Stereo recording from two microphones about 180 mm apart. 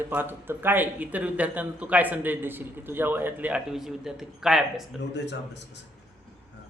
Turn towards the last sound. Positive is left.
turn(degrees=75)  # may be behind; listen again after turning